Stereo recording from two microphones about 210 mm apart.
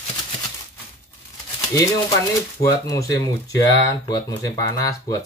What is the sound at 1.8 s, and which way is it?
Speech, 15° left (ahead or behind).